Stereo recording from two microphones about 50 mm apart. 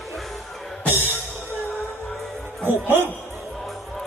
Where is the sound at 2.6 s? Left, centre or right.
Right.